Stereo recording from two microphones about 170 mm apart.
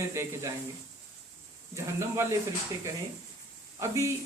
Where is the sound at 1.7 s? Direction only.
15° right (ahead or behind).